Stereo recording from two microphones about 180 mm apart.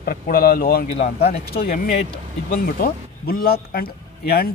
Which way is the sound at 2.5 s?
55° left (ahead or behind).